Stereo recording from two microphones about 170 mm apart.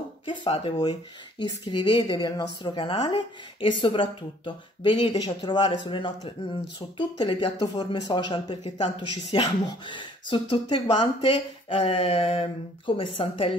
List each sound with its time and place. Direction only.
0.3 s speech: 30° left (ahead or behind)